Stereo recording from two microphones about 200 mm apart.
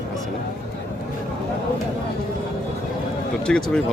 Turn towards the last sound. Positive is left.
turn(degrees=5)  # may be behind; listen again after turning